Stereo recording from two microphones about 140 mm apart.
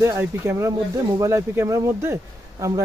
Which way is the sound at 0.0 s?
20° right (ahead or behind).